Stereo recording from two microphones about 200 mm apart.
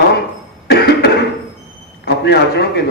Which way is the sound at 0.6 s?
55° left (ahead or behind).